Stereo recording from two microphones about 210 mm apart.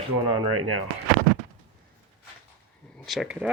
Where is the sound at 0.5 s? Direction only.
90° right.